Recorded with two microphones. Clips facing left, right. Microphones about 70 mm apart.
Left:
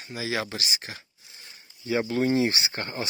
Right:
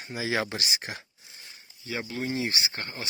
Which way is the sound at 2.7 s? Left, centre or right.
Left.